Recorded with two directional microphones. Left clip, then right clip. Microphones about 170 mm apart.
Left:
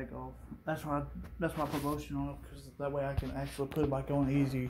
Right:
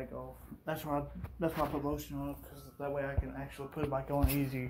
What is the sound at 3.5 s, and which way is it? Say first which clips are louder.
Speech: left 3 dB; 50° left (ahead or behind).